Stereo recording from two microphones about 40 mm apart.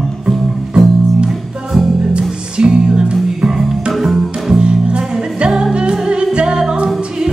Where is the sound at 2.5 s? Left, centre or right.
Right.